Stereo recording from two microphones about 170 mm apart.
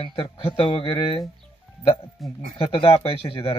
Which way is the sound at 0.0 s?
30° left (ahead or behind).